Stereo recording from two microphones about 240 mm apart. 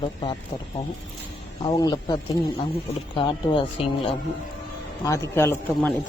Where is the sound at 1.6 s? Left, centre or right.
Centre.